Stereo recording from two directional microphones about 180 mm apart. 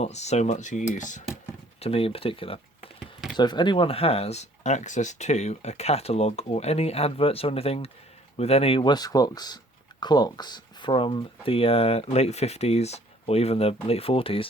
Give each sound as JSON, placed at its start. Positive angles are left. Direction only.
{"t": 0.0, "sound": "speech", "side_deg": 40}
{"t": 1.8, "sound": "speech", "side_deg": 30}